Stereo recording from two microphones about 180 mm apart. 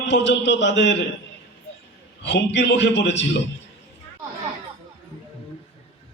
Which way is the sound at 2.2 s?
75° left (ahead or behind).